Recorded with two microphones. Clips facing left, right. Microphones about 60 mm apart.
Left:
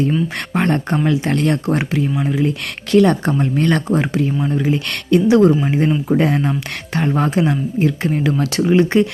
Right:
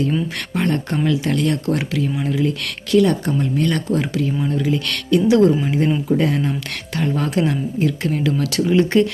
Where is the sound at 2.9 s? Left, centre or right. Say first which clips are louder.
Left 3 dB; left.